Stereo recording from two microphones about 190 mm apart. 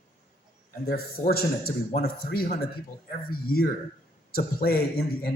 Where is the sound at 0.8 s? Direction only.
55° left (ahead or behind).